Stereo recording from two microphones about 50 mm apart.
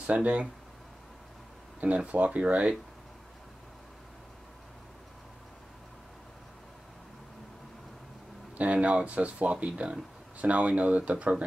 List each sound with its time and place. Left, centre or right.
0.0 s speech: right
1.8 s speech: right
8.5 s speech: right